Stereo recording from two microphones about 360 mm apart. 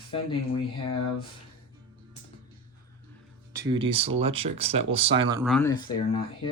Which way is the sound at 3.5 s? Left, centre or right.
Centre.